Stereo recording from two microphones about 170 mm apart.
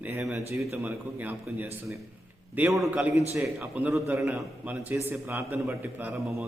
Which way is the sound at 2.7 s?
Centre (ahead or behind).